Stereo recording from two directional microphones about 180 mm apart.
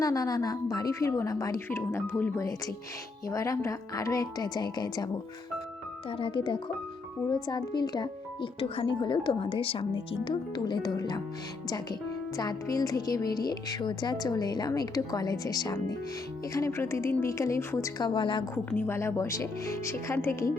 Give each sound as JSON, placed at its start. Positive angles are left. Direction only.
{"t": 0.0, "sound": "speech", "side_deg": 20}
{"t": 12.4, "sound": "a woman's voice", "side_deg": 20}
{"t": 18.5, "sound": "a woman's voice", "side_deg": 15}